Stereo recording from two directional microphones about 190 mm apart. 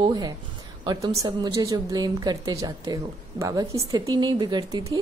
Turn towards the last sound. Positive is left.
turn(degrees=-20)  # may be behind; listen again after turning